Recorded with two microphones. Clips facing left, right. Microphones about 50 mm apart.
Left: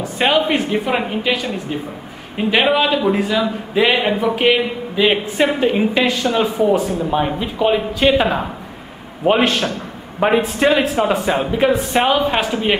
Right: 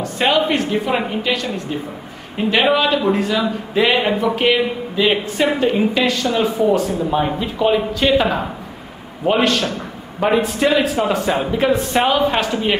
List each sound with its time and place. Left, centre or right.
0.0 s a man's voice: centre
6.9 s a man's voice: centre
9.2 s a man's voice: left; by 12.5 s centre